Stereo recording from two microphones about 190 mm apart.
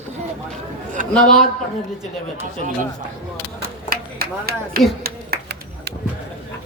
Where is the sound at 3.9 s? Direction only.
50° right (ahead or behind).